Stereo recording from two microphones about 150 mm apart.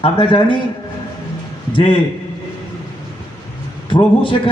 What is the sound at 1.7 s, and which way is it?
Speech, 35° left (ahead or behind).